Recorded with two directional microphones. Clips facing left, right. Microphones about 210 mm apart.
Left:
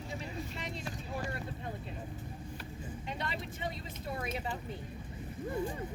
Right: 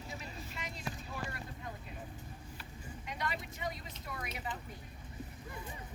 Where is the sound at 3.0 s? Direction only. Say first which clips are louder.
Even; 30° left (ahead or behind).